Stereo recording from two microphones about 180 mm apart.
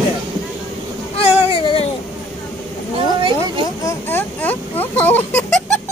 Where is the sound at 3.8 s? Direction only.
10° left (ahead or behind).